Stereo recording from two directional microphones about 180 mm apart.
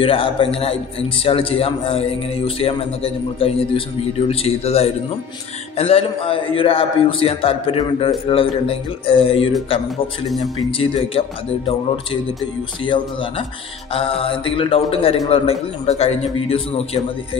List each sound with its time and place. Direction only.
0.0 s a man's voice: 30° left (ahead or behind)
10.2 s speech: centre (ahead or behind)
10.8 s a man's voice: 30° left (ahead or behind)